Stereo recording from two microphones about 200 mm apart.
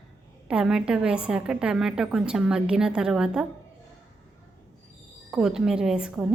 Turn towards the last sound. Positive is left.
turn(degrees=-5)  # may be behind; listen again after turning